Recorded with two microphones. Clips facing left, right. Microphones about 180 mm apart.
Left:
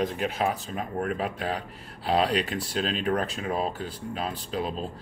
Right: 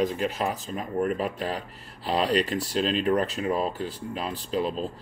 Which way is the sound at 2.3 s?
Centre (ahead or behind).